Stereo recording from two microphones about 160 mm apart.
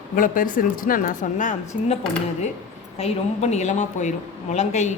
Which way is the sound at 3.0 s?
45° left (ahead or behind).